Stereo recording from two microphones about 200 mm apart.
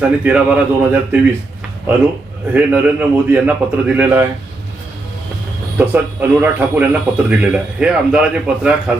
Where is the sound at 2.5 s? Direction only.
5° right (ahead or behind).